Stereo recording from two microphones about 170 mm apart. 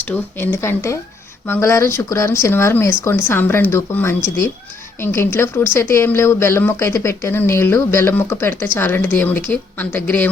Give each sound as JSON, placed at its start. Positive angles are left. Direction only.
{"t": 0.0, "sound": "speech", "side_deg": 10}